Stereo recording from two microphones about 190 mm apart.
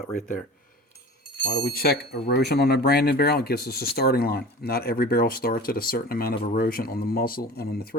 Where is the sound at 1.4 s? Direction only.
60° left (ahead or behind).